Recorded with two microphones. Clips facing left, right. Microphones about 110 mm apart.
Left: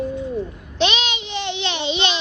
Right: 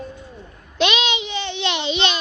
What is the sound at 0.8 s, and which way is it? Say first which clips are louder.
Child singing: right 1 dB; 35° left (ahead or behind).